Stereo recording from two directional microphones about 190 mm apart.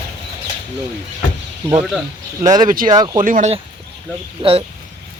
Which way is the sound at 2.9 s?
20° right (ahead or behind).